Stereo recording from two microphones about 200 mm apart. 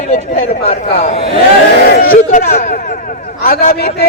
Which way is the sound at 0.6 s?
30° left (ahead or behind).